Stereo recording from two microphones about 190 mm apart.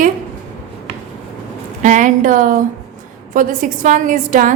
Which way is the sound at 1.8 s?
40° right (ahead or behind).